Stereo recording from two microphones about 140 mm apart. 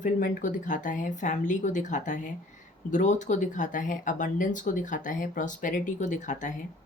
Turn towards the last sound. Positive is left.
turn(degrees=60)  # may be behind; listen again after turning